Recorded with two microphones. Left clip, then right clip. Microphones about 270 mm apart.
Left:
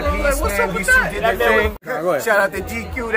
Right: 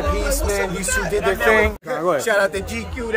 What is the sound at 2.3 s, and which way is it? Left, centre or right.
Speech, centre.